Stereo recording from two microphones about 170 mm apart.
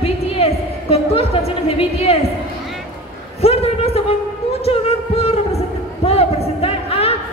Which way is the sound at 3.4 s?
35° left (ahead or behind).